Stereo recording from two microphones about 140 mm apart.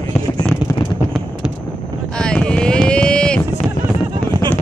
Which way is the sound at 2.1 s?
5° left (ahead or behind).